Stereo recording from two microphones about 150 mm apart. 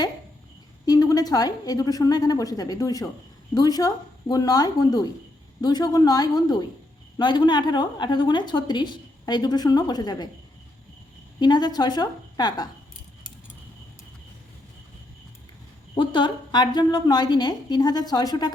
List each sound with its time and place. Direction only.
0.9 s a woman's voice: 25° left (ahead or behind)
11.3 s a woman's voice: 30° left (ahead or behind)
16.0 s a woman's voice: 30° left (ahead or behind)